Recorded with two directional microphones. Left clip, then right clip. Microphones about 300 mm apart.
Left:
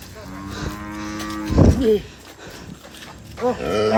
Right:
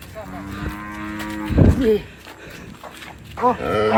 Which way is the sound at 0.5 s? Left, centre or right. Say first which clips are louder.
Left 1 dB; centre.